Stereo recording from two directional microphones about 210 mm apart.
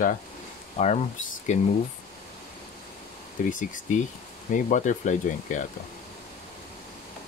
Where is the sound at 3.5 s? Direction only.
40° left (ahead or behind).